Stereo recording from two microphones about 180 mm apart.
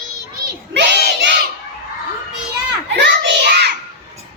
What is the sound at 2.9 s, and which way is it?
Child singing, 70° right (ahead or behind).